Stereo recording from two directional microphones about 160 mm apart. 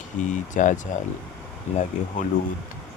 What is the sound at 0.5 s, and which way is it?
Speech, 50° left (ahead or behind).